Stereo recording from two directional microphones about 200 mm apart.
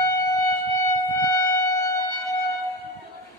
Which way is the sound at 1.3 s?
20° left (ahead or behind).